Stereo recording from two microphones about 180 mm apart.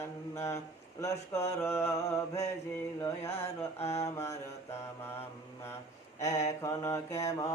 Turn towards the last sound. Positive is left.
turn(degrees=15)  # may be behind; listen again after turning